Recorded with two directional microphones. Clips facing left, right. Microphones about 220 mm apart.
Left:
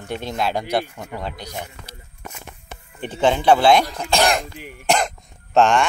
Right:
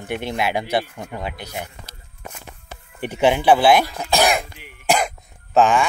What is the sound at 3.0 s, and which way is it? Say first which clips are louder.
Speech: right 1 dB; 10° right (ahead or behind).